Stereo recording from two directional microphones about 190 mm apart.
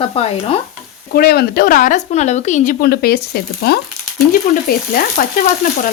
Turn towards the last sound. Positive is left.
turn(degrees=50)  # may be behind; listen again after turning